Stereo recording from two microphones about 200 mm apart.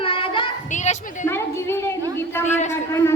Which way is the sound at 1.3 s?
10° left (ahead or behind).